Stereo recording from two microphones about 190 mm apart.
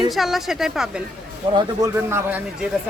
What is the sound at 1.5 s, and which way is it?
Speech, 15° right (ahead or behind).